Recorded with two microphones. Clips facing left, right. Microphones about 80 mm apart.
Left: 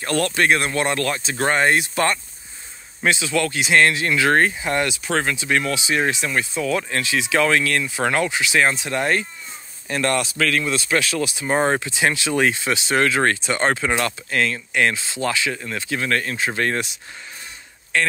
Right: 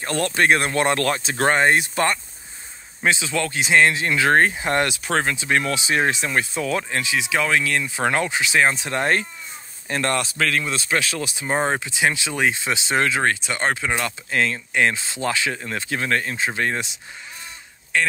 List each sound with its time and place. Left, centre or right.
0.0 s speech: right
0.3 s speech: right
1.5 s speech: right
5.2 s speech: right
6.8 s speech: centre
11.4 s speech: centre
14.3 s speech: right
15.0 s speech: right
16.1 s speech: right
17.9 s speech: centre